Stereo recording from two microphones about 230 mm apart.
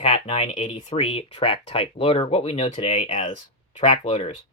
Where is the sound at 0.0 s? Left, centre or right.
Left.